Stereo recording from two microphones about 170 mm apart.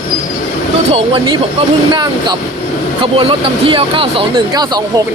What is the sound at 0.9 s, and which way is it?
Speech, 30° right (ahead or behind).